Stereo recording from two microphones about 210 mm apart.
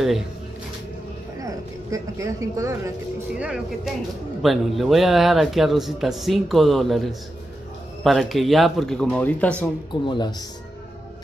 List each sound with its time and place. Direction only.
1.4 s speech: 15° right (ahead or behind)
3.3 s speech: 5° right (ahead or behind)
10.0 s speech: 20° left (ahead or behind)